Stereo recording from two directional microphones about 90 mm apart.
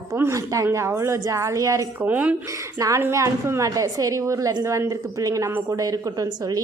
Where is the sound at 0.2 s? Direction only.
35° right (ahead or behind).